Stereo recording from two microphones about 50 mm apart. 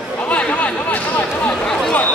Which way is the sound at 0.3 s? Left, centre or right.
Left.